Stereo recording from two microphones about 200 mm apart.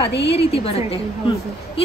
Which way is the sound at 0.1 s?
60° left (ahead or behind).